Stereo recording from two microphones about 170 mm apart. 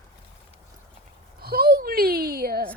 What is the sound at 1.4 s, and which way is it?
A child's voice, 65° right (ahead or behind).